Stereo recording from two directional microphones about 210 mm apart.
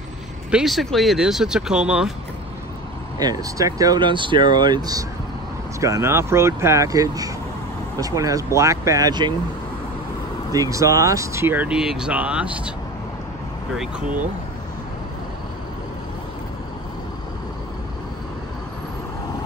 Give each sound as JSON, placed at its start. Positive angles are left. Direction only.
{"t": 0.5, "sound": "speech", "side_deg": 0}
{"t": 3.2, "sound": "speech", "side_deg": -15}
{"t": 10.5, "sound": "speech", "side_deg": -15}
{"t": 13.7, "sound": "speech", "side_deg": -5}